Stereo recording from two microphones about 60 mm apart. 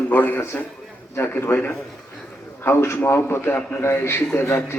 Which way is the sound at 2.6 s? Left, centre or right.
Left.